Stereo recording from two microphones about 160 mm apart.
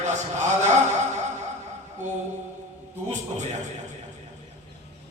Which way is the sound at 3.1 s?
50° right (ahead or behind).